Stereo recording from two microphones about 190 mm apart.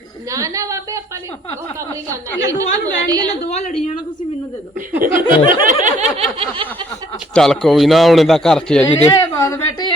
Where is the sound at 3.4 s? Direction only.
35° left (ahead or behind).